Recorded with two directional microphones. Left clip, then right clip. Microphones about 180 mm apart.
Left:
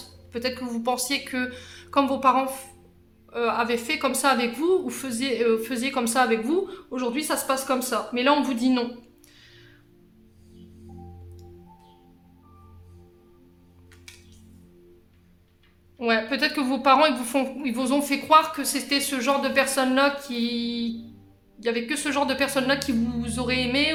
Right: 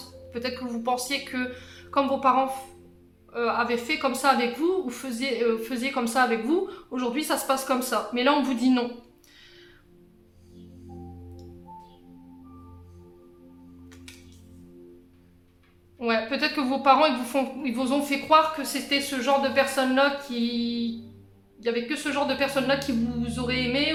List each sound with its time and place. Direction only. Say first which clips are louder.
0.3 s a woman's voice: left 2 dB; 25° left (ahead or behind)
16.0 s a woman's voice: left 2 dB; 25° left (ahead or behind)